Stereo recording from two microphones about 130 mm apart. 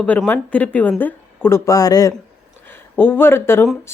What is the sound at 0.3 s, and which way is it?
Speech, 10° left (ahead or behind).